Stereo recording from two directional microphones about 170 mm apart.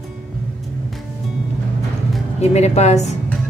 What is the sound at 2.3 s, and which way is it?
Speech, 40° left (ahead or behind).